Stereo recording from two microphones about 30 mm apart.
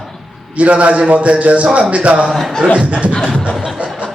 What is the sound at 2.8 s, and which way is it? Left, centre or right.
Speech, right.